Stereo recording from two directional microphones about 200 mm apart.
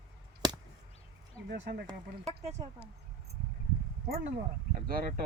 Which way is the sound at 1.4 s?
55° right (ahead or behind).